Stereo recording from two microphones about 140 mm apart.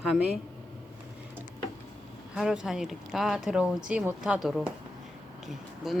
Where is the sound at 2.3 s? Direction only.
5° right (ahead or behind).